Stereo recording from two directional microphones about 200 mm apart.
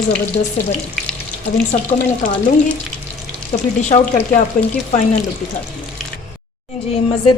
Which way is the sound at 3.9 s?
35° left (ahead or behind).